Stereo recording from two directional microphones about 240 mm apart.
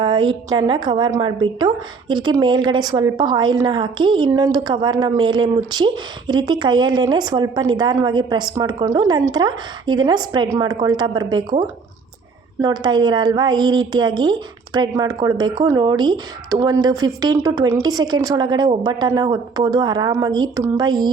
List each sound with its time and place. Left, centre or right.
0.0 s a woman's voice: centre
12.6 s a woman's voice: centre